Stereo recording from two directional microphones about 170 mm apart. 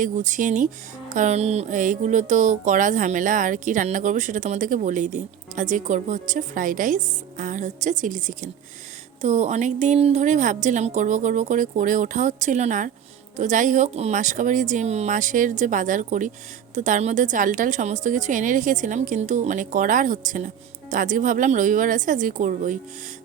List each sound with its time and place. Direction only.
0.0 s speech: 50° right (ahead or behind)